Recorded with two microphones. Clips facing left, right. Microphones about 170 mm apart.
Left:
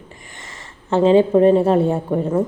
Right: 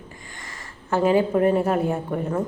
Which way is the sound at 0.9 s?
25° left (ahead or behind).